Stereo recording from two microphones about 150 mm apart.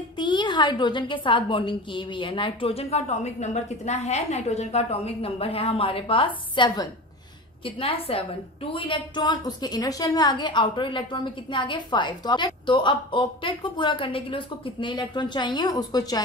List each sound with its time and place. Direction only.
0.2 s a woman's voice: 30° left (ahead or behind)